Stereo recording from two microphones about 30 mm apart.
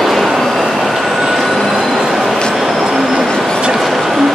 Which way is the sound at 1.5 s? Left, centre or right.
Centre.